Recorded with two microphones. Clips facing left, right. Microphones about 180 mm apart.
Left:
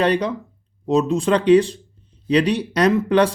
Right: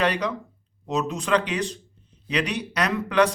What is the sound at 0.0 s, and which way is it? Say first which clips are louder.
Speech: left 5 dB; 30° left (ahead or behind).